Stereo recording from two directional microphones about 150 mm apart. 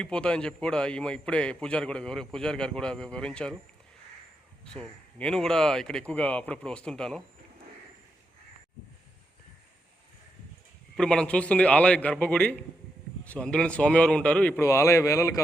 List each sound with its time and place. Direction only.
0.0 s a man's voice: 5° left (ahead or behind)
4.6 s a man's voice: 5° left (ahead or behind)
10.9 s a man's voice: 5° left (ahead or behind)
14.7 s a man's voice: 20° left (ahead or behind)